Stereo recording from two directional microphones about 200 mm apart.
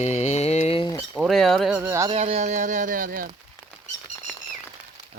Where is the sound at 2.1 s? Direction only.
30° right (ahead or behind).